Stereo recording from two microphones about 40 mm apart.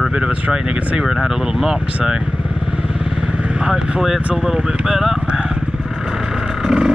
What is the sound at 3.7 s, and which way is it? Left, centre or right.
Speech, centre.